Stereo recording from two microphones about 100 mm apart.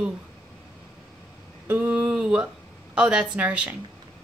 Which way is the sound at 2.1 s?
10° right (ahead or behind).